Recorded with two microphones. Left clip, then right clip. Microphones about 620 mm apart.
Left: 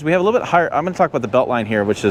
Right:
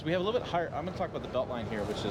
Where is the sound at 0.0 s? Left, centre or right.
Left.